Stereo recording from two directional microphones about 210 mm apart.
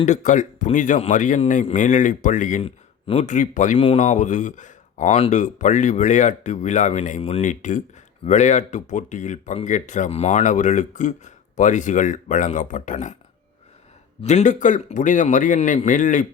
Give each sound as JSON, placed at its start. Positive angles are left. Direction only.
{"t": 0.0, "sound": "speech", "side_deg": 35}
{"t": 14.2, "sound": "speech", "side_deg": 30}